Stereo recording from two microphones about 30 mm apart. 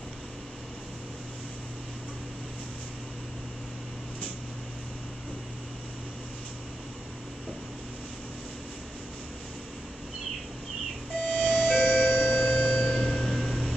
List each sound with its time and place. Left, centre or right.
11.1 s music: left
12.7 s music: left
13.1 s chime: left